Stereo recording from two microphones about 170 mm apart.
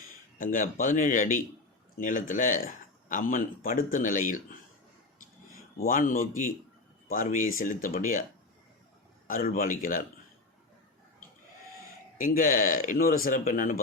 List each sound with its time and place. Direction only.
0.3 s speech: 50° left (ahead or behind)
5.7 s speech: 55° left (ahead or behind)
9.2 s a man's voice: 55° left (ahead or behind)
12.1 s speech: 50° left (ahead or behind)